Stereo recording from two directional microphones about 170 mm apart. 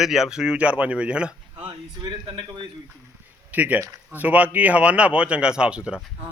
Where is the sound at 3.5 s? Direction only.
10° right (ahead or behind).